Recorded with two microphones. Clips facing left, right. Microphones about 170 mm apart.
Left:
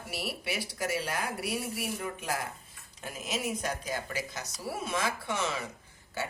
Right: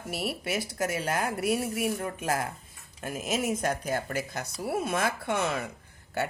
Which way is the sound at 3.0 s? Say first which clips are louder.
Right 5 dB; 50° right (ahead or behind).